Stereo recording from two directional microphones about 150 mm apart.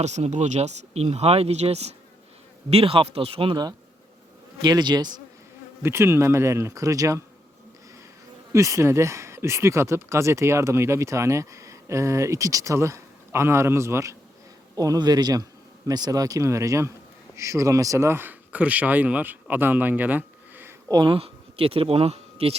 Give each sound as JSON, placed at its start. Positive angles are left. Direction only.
{"t": 0.0, "sound": "speech", "side_deg": -50}
{"t": 5.8, "sound": "speech", "side_deg": -15}
{"t": 8.5, "sound": "speech", "side_deg": -20}
{"t": 20.9, "sound": "speech", "side_deg": -35}